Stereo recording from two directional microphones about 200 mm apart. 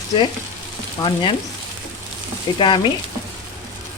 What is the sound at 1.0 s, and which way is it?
Speech, 25° left (ahead or behind).